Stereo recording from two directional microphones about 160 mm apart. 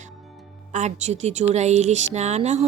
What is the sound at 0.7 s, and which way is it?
A woman's voice, 45° right (ahead or behind).